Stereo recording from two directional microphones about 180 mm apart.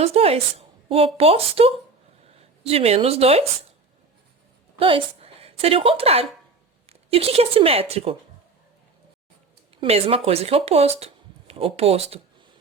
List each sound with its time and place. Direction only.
0.0 s a woman's voice: 35° right (ahead or behind)
4.8 s a woman's voice: 30° right (ahead or behind)
9.8 s speech: 35° right (ahead or behind)